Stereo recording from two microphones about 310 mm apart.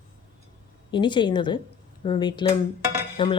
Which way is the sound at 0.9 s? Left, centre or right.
Centre.